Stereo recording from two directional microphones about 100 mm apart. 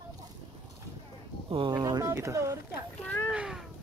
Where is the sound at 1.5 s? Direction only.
60° right (ahead or behind).